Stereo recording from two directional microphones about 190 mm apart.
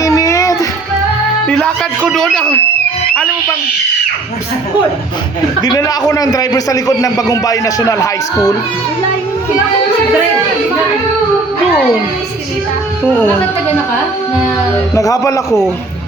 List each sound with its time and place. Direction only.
0.0 s music: 15° left (ahead or behind)
1.5 s music: 5° left (ahead or behind)
2.0 s speech: centre (ahead or behind)
5.6 s a man's voice: 20° left (ahead or behind)
13.1 s a man's voice: 10° left (ahead or behind)
14.9 s a man's voice: 15° left (ahead or behind)